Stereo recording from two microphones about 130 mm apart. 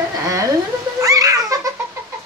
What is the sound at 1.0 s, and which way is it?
Baby laughter, 25° right (ahead or behind).